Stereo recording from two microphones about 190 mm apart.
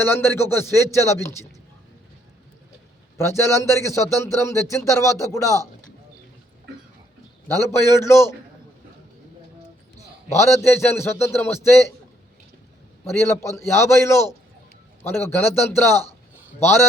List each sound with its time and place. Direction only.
0.0 s a man's voice: 10° left (ahead or behind)
3.2 s a man's voice: 15° left (ahead or behind)
7.4 s a man's voice: 15° left (ahead or behind)
10.2 s a man's voice: 15° left (ahead or behind)
13.7 s a man's voice: 15° left (ahead or behind)